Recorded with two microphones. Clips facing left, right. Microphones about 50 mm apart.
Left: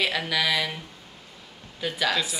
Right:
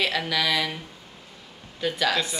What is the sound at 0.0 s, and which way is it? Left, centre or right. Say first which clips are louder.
Speech: even; centre.